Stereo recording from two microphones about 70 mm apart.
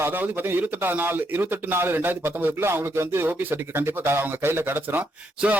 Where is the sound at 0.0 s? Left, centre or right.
Right.